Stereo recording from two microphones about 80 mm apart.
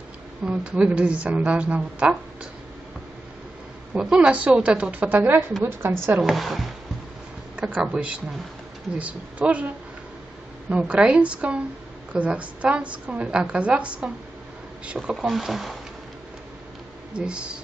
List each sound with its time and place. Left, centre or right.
0.5 s a woman's voice: centre
3.9 s a woman's voice: centre
6.2 s speech: centre
7.5 s a woman's voice: centre
10.7 s a woman's voice: centre
15.0 s speech: centre
17.1 s a woman's voice: centre